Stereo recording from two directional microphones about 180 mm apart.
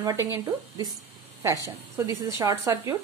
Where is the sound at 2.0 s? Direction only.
15° right (ahead or behind).